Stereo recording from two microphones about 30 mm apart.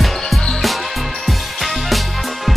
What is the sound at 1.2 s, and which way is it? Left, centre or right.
Music, centre.